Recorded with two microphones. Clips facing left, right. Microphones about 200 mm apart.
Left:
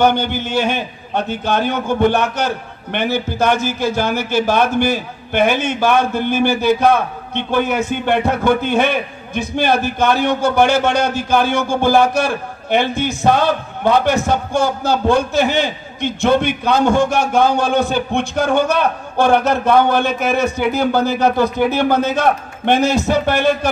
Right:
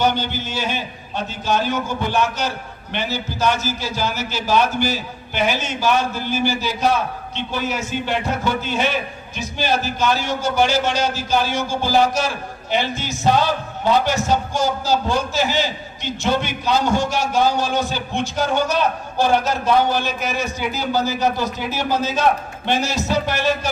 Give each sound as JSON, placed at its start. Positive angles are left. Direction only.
{"t": 0.0, "sound": "a man's voice", "side_deg": 55}